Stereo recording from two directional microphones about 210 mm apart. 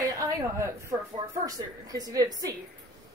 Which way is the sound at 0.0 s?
15° right (ahead or behind).